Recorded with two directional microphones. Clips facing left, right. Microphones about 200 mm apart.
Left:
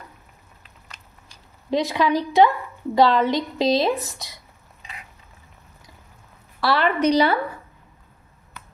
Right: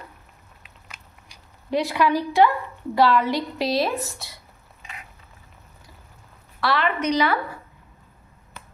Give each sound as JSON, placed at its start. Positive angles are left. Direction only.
{"t": 0.8, "sound": "a sound", "side_deg": -10}
{"t": 1.7, "sound": "a woman's voice", "side_deg": 20}
{"t": 6.6, "sound": "a woman's voice", "side_deg": 35}